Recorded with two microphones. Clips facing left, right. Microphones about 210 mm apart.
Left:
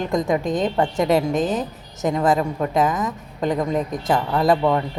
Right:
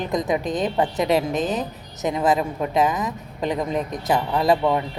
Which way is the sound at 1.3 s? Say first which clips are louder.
Left 2 dB; centre (ahead or behind).